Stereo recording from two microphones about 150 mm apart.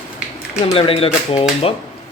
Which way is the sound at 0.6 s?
40° left (ahead or behind).